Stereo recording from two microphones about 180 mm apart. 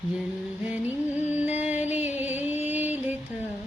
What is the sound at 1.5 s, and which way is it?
Music, 40° left (ahead or behind).